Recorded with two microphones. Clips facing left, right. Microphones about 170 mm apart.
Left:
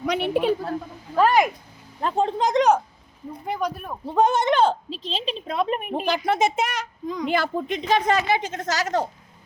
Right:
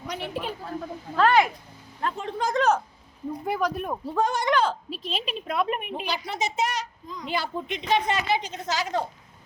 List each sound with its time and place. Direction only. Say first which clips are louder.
0.0 s a man's voice: left 10 dB; 70° left (ahead or behind)
1.1 s a woman's voice: left 2 dB; 10° left (ahead or behind)
2.0 s a woman's voice: left 8 dB; 30° left (ahead or behind)
2.4 s a woman's voice: left 3 dB; 20° left (ahead or behind)
3.4 s speech: even; 5° right (ahead or behind)
4.0 s speech: left 7 dB; 20° left (ahead or behind)
5.8 s a woman's voice: left 7 dB; 45° left (ahead or behind); by 7.3 s 65° left (ahead or behind)
7.3 s a woman's voice: left 2 dB; 50° left (ahead or behind)